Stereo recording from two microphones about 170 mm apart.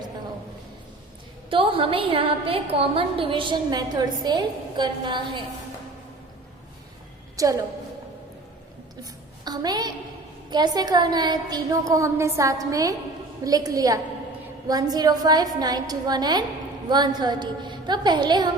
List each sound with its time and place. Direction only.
1.5 s a woman's voice: 30° right (ahead or behind)
7.3 s a woman's voice: 20° right (ahead or behind)
9.4 s a woman's voice: 25° right (ahead or behind)